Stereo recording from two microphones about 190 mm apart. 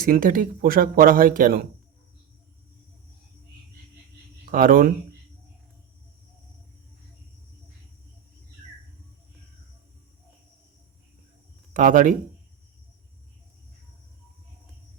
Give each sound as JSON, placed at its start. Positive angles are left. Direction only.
{"t": 0.0, "sound": "speech", "side_deg": -45}
{"t": 4.5, "sound": "speech", "side_deg": -45}
{"t": 11.7, "sound": "speech", "side_deg": -45}